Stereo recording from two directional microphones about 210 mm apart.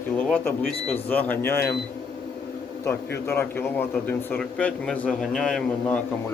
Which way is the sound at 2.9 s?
10° left (ahead or behind).